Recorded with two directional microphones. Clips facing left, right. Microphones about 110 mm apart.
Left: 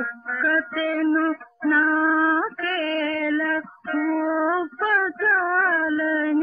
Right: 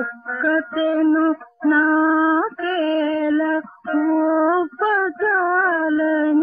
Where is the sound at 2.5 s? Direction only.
25° right (ahead or behind).